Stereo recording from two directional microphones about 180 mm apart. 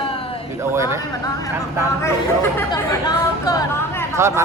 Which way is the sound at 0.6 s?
15° right (ahead or behind).